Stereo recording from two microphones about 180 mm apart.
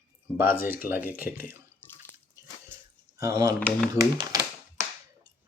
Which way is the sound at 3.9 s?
20° right (ahead or behind).